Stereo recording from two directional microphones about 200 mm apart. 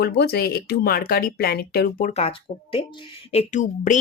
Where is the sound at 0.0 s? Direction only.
55° left (ahead or behind).